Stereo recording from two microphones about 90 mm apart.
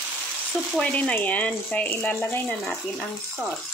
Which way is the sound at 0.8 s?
15° left (ahead or behind).